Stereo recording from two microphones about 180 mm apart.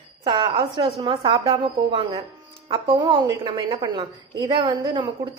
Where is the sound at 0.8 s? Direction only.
30° right (ahead or behind).